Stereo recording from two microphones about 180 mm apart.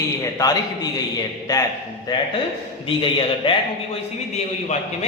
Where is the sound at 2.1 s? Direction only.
25° left (ahead or behind).